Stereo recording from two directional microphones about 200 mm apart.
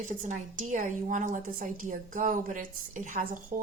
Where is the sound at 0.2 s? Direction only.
40° right (ahead or behind).